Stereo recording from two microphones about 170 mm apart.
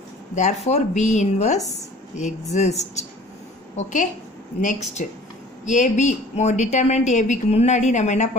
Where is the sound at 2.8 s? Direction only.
40° left (ahead or behind).